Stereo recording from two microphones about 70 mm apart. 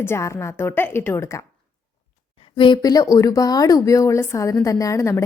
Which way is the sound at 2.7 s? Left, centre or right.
Left.